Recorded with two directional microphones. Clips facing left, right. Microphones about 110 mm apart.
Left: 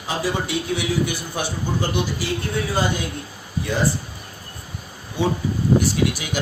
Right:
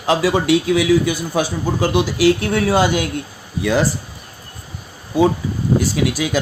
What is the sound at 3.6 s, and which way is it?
Speech, 90° right.